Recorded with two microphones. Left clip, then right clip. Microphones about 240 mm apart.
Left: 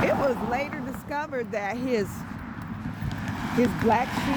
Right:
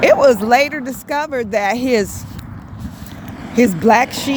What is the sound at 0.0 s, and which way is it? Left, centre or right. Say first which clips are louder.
Speech: right 14 dB; right.